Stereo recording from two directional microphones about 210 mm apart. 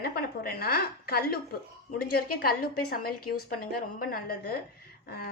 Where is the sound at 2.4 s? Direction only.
45° left (ahead or behind).